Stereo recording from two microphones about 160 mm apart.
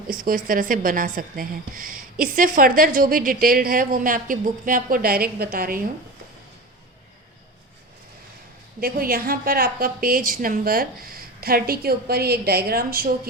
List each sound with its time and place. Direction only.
0.1 s a woman's voice: 60° right (ahead or behind)
8.8 s a woman's voice: 65° right (ahead or behind)